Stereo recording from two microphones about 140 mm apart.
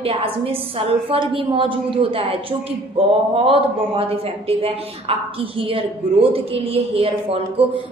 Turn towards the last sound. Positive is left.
turn(degrees=-45)  # may be behind; listen again after turning